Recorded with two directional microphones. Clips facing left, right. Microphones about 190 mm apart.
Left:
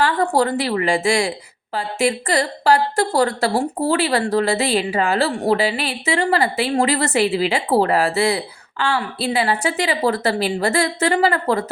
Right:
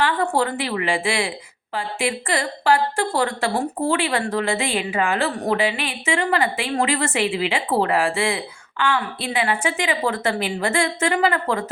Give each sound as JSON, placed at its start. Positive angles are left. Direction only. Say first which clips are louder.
{"t": 0.0, "sound": "a woman's voice", "louder": "left 3 dB", "side_deg": 40}